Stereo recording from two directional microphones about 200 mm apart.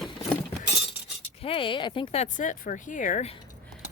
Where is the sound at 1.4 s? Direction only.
25° left (ahead or behind).